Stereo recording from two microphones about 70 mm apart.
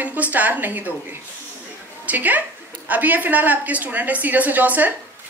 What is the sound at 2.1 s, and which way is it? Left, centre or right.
A woman's voice, right.